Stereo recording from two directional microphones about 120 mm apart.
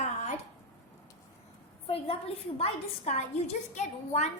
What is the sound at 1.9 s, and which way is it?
A woman's voice, 55° left (ahead or behind).